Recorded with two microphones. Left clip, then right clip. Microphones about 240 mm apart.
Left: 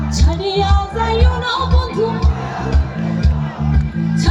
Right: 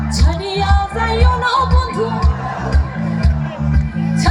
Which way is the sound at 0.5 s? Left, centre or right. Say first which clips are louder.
Right 1 dB; centre.